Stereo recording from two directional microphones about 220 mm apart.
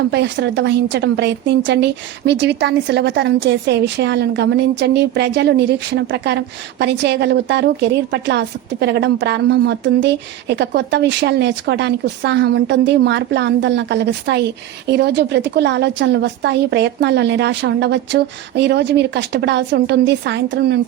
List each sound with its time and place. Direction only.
0.1 s speech: 50° right (ahead or behind)